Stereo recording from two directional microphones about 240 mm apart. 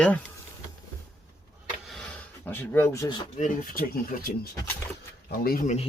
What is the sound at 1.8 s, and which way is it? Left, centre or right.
Wood, centre.